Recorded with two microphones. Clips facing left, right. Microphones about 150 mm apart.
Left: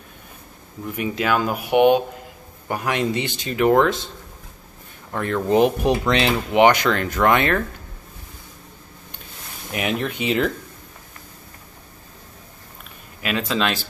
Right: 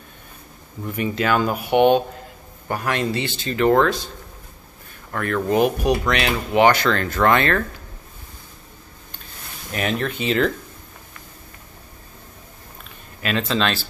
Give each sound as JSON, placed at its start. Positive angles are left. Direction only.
{"t": 0.8, "sound": "speech", "side_deg": 5}
{"t": 5.1, "sound": "speech", "side_deg": 20}
{"t": 9.7, "sound": "speech", "side_deg": 15}
{"t": 13.2, "sound": "speech", "side_deg": 10}